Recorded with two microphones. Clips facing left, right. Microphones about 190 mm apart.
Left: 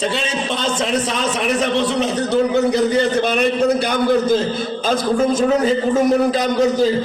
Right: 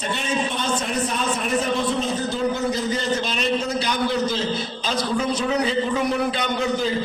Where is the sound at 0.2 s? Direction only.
90° left.